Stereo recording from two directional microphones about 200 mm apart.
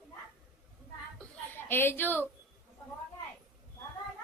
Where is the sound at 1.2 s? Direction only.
10° left (ahead or behind).